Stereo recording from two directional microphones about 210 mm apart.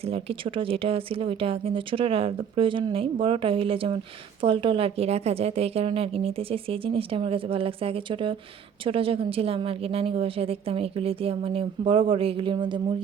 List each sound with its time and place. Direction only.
0.1 s a woman's voice: 25° right (ahead or behind)